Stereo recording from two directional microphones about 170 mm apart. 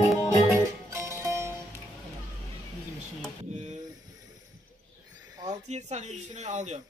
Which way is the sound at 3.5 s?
45° right (ahead or behind).